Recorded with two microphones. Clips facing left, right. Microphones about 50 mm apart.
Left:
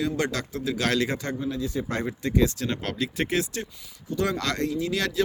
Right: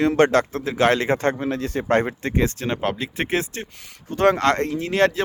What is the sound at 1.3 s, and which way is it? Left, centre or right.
Speech, right.